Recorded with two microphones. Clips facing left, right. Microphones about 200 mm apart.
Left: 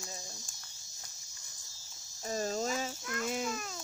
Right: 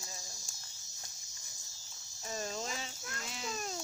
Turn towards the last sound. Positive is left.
turn(degrees=50)  # may be behind; listen again after turning